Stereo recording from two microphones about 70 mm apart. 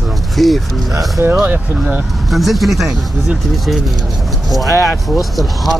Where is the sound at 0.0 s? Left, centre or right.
Centre.